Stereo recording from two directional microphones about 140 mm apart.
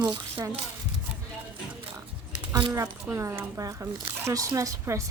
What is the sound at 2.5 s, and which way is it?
Speech, 30° right (ahead or behind).